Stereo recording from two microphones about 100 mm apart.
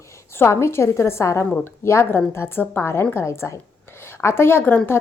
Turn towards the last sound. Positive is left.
turn(degrees=20)  # may be behind; listen again after turning